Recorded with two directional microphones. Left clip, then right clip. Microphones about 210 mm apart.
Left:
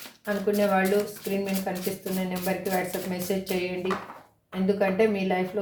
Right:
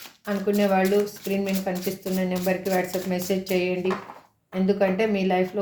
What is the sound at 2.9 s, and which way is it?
Speech, 45° right (ahead or behind).